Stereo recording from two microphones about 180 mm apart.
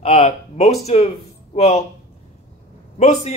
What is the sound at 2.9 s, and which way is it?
Speech, 40° left (ahead or behind).